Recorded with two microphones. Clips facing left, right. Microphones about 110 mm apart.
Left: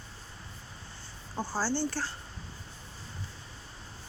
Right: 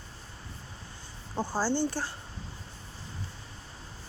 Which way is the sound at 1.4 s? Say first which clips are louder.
Right 3 dB; 20° right (ahead or behind).